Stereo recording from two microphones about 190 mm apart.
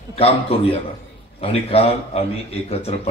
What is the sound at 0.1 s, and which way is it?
A man's voice, 30° left (ahead or behind).